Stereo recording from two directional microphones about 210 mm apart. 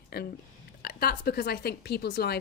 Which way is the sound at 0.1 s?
50° left (ahead or behind).